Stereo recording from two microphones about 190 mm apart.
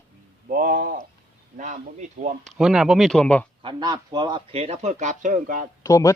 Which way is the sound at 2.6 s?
Centre (ahead or behind).